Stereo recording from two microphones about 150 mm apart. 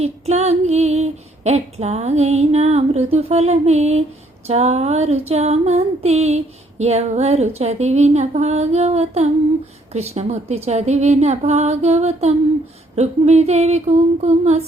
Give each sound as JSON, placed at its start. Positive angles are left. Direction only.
{"t": 0.0, "sound": "female singing", "side_deg": -45}